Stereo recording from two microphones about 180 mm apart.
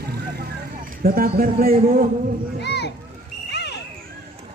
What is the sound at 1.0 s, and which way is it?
Speech, 55° right (ahead or behind).